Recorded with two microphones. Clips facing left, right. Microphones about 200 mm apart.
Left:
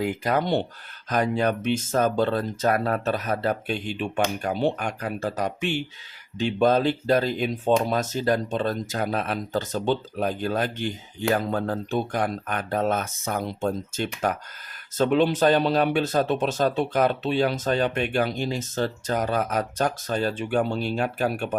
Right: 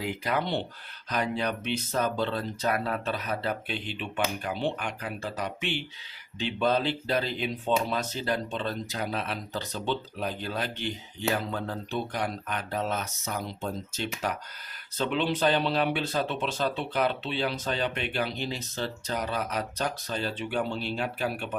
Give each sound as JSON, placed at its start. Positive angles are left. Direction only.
{"t": 0.0, "sound": "speech", "side_deg": 45}